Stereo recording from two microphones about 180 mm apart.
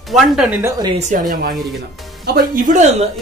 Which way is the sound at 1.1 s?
50° right (ahead or behind).